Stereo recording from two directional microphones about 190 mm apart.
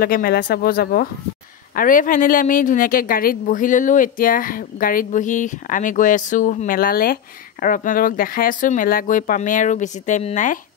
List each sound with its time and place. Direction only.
0.0 s speech: 55° left (ahead or behind)